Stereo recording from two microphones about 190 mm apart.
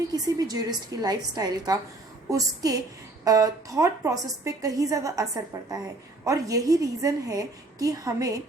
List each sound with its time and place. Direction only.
0.1 s a woman's voice: 20° right (ahead or behind)